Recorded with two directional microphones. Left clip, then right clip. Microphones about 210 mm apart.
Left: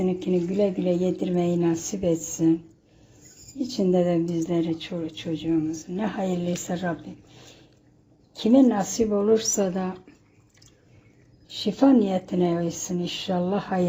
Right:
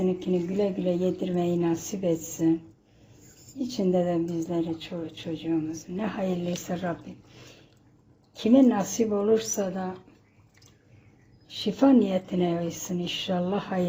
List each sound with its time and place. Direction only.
0.0 s speech: 10° left (ahead or behind)
3.6 s speech: 10° left (ahead or behind)
8.4 s speech: 5° left (ahead or behind)
9.3 s a woman's voice: 15° left (ahead or behind)
11.5 s speech: 5° left (ahead or behind)